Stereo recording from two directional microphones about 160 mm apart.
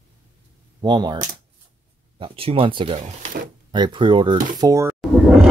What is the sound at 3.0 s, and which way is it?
Speech, 45° right (ahead or behind).